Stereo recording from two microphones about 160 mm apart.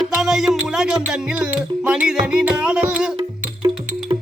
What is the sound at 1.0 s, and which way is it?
Music, 5° right (ahead or behind).